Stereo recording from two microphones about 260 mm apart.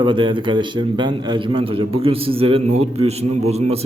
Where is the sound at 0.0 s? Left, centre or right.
Centre.